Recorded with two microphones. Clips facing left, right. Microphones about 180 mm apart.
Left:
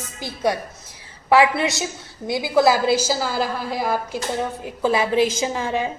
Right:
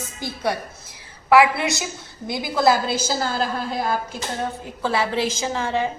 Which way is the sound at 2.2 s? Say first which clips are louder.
Left 2 dB; 10° left (ahead or behind).